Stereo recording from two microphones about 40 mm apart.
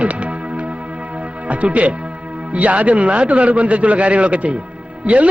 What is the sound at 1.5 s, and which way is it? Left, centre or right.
Speech, right.